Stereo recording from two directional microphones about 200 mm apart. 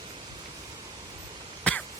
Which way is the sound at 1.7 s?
5° left (ahead or behind).